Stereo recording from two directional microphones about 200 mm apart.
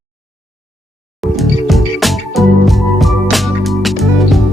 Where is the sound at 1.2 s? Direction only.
Centre (ahead or behind).